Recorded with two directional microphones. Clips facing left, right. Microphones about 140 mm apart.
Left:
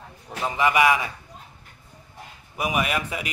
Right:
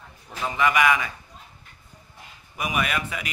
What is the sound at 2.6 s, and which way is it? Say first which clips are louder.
Speech: left 2 dB; 15° left (ahead or behind).